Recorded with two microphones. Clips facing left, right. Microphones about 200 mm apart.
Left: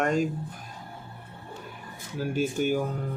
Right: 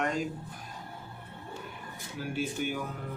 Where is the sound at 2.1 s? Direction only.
45° left (ahead or behind).